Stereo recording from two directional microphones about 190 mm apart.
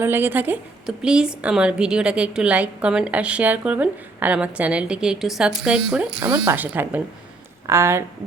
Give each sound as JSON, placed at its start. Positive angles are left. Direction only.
{"t": 0.0, "sound": "a woman's voice", "side_deg": -10}
{"t": 6.3, "sound": "speech", "side_deg": -15}